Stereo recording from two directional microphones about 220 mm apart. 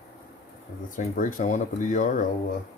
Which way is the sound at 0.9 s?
40° left (ahead or behind).